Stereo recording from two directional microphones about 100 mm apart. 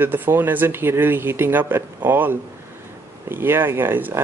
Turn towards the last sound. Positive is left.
turn(degrees=-20)  # may be behind; listen again after turning